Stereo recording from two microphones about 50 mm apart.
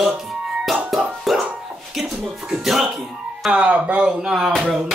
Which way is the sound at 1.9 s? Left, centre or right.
Centre.